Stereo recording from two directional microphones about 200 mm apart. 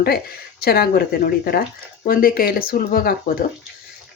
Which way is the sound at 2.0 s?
45° left (ahead or behind).